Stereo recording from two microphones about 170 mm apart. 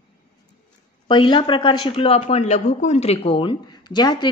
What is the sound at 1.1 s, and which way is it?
Speech, 30° left (ahead or behind).